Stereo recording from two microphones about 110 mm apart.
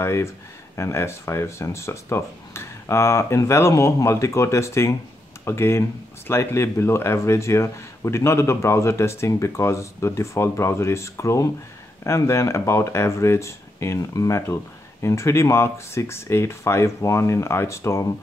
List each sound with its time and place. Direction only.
0.0 s speech: 25° left (ahead or behind)